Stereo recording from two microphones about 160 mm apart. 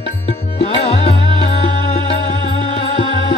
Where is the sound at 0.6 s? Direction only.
35° left (ahead or behind).